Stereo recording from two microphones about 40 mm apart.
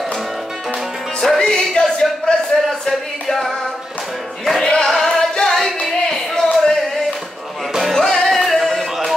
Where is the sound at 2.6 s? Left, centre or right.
Centre.